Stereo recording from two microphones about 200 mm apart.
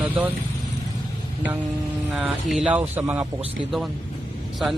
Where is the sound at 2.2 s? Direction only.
5° right (ahead or behind).